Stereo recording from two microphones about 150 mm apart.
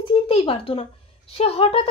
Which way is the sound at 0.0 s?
35° left (ahead or behind).